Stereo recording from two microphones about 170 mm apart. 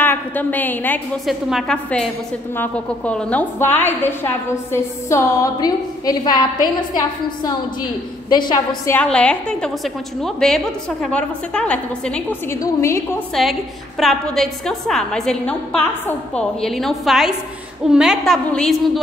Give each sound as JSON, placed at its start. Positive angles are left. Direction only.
{"t": 0.0, "sound": "a woman's voice", "side_deg": 10}
{"t": 8.9, "sound": "a woman's voice", "side_deg": 5}